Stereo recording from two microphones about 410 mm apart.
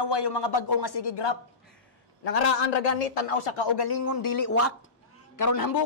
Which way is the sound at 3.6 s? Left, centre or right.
Left.